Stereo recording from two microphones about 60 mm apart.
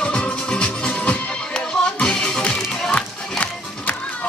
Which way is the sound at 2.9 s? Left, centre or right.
Left.